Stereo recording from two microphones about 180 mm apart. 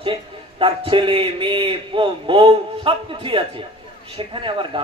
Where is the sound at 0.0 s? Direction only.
30° right (ahead or behind).